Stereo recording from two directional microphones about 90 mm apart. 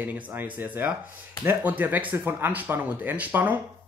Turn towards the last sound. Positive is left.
turn(degrees=-20)  # may be behind; listen again after turning